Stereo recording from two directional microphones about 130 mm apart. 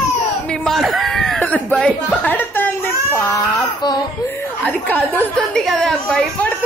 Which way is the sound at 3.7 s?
30° left (ahead or behind).